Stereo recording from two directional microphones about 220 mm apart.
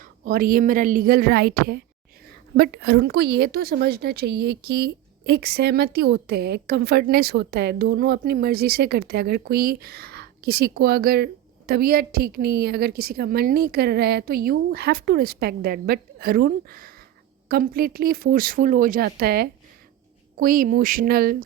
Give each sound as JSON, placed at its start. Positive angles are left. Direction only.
{"t": 0.0, "sound": "a woman's voice", "side_deg": -40}